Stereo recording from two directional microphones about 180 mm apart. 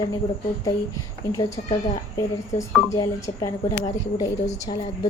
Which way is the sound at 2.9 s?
20° left (ahead or behind).